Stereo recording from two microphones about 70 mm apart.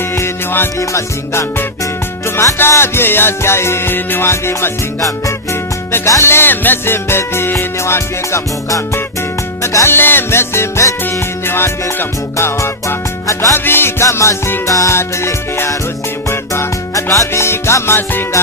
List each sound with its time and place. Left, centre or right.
0.2 s music: left
0.8 s music: left
4.9 s music: left
6.1 s music: left
13.7 s music: left
14.0 s music: left
14.7 s music: left
14.9 s music: left